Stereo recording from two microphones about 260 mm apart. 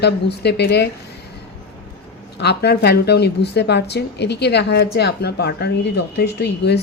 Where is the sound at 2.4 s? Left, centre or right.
Left.